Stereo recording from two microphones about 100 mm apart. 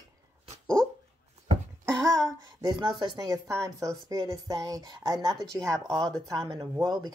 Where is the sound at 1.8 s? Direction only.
35° right (ahead or behind).